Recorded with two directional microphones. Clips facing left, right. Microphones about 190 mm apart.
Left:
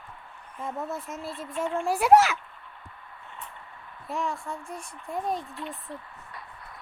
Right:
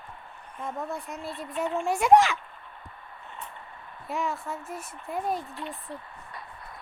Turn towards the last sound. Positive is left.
turn(degrees=0)  # may be behind; listen again after turning